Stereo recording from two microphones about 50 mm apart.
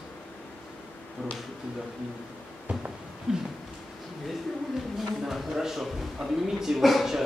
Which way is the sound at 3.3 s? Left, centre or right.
Centre.